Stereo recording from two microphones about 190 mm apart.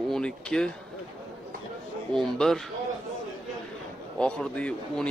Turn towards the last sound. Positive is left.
turn(degrees=5)  # may be behind; listen again after turning